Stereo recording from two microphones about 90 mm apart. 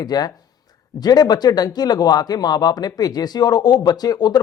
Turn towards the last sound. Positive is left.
turn(degrees=50)  # may be behind; listen again after turning